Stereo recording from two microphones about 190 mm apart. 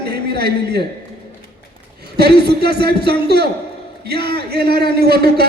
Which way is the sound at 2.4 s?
60° right (ahead or behind).